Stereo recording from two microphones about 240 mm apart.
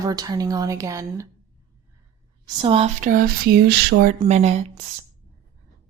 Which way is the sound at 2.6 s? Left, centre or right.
Right.